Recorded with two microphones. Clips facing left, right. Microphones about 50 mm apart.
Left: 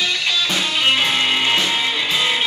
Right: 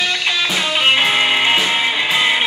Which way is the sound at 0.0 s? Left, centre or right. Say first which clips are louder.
Right 2 dB; centre.